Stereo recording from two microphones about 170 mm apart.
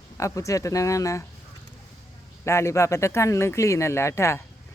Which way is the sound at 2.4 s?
15° left (ahead or behind).